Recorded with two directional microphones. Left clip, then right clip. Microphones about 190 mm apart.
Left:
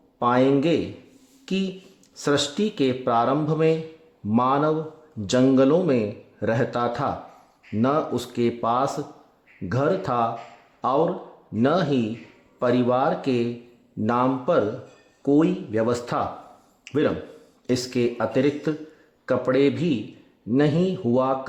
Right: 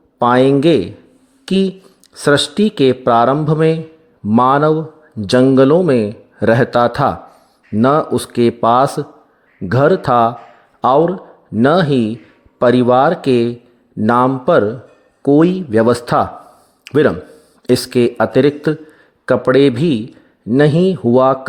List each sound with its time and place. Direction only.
0.2 s speech: 40° right (ahead or behind)
16.8 s a sound: 40° right (ahead or behind)
17.7 s speech: 40° right (ahead or behind)